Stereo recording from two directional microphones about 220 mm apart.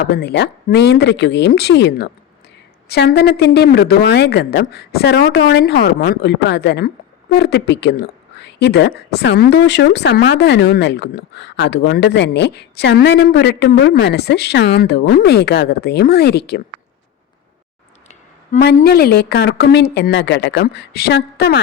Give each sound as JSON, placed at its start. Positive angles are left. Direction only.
{"t": 0.1, "sound": "speech", "side_deg": 50}
{"t": 18.5, "sound": "speech", "side_deg": 45}